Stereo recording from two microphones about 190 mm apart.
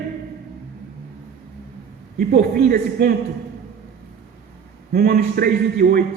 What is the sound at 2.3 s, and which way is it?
Speech, 55° right (ahead or behind).